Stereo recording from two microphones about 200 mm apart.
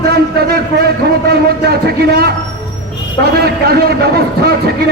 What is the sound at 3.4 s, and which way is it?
A man's voice, 50° right (ahead or behind).